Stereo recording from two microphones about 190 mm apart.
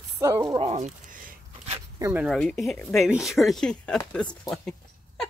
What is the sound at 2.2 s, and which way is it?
Speech, centre (ahead or behind).